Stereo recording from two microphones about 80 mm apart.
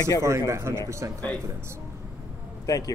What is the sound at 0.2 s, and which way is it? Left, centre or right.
Speech, right.